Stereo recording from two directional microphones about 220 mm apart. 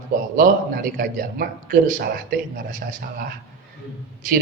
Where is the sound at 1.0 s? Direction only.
40° right (ahead or behind).